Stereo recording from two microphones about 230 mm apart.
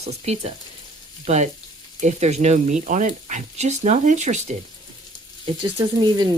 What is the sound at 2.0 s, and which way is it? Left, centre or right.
Speech, right.